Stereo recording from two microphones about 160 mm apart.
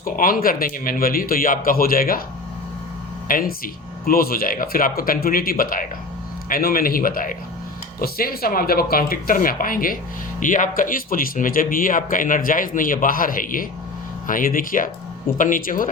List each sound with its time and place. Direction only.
0.0 s speech: 60° left (ahead or behind)
3.2 s speech: 65° left (ahead or behind)